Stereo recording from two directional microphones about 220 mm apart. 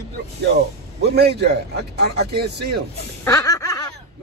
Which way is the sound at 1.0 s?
50° right (ahead or behind).